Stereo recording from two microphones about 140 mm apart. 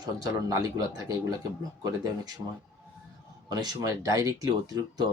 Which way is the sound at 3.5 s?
30° right (ahead or behind).